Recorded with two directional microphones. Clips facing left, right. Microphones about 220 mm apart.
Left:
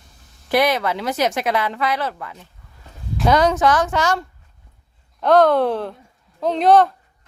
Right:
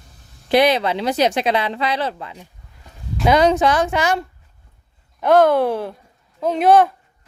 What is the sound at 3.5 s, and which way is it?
Speech, 25° right (ahead or behind).